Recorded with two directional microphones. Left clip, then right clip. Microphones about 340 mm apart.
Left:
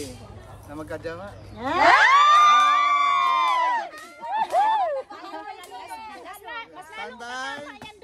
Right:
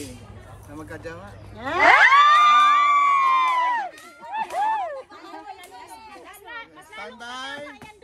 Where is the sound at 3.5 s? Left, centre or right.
Centre.